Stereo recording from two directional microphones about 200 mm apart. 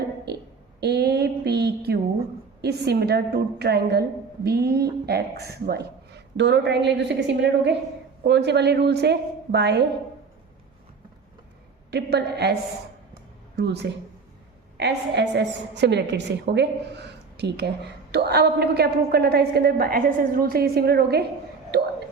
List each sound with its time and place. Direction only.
0.8 s a sound: 55° right (ahead or behind)
2.6 s a woman's voice: 55° right (ahead or behind)
11.9 s a woman's voice: 55° right (ahead or behind)
13.6 s a woman's voice: 55° right (ahead or behind)
21.7 s whispering: 55° right (ahead or behind)